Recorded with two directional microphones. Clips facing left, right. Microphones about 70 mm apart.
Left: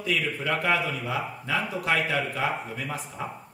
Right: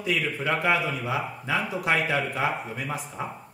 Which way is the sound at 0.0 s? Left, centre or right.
Centre.